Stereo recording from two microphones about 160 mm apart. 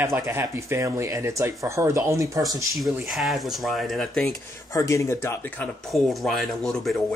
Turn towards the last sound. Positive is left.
turn(degrees=0)  # may be behind; listen again after turning